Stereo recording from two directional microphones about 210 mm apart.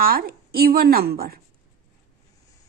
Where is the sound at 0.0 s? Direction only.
45° right (ahead or behind).